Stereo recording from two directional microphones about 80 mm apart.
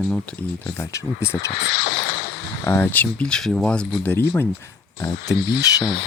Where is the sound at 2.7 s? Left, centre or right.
Left.